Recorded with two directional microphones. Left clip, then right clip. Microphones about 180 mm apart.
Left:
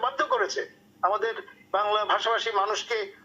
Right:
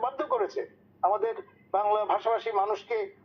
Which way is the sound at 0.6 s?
25° left (ahead or behind).